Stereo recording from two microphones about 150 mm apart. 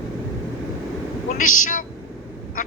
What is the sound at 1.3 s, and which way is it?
Speech, 60° left (ahead or behind).